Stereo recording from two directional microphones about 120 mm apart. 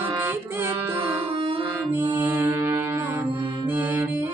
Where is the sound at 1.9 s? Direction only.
20° right (ahead or behind).